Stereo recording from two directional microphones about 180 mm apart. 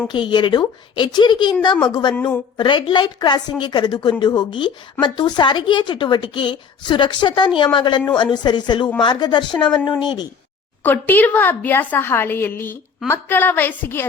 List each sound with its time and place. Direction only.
0.1 s a woman's voice: 25° left (ahead or behind)
2.1 s a woman's voice: 10° left (ahead or behind)
2.6 s a woman's voice: 25° left (ahead or behind)
10.8 s a woman's voice: 10° left (ahead or behind)